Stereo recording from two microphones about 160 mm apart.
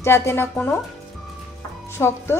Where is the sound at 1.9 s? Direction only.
15° left (ahead or behind).